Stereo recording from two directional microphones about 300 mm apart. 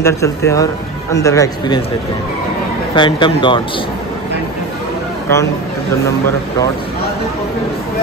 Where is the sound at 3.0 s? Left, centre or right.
Centre.